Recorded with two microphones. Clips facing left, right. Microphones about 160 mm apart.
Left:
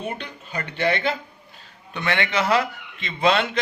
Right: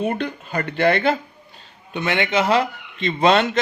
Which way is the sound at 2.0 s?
20° right (ahead or behind).